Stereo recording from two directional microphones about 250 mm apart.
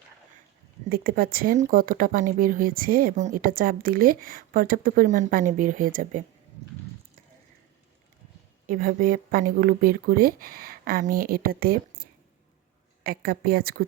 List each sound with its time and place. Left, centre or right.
0.9 s speech: right
8.6 s speech: right